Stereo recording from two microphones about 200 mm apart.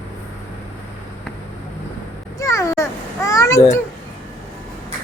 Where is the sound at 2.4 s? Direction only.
15° left (ahead or behind).